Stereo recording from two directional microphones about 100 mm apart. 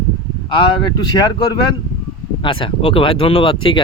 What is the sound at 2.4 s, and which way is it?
Speech, 60° left (ahead or behind).